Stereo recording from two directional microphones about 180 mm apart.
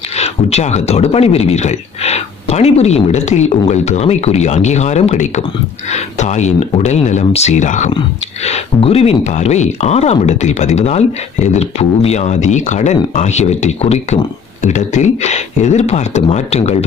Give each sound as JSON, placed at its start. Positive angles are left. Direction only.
{"t": 0.2, "sound": "speech", "side_deg": 35}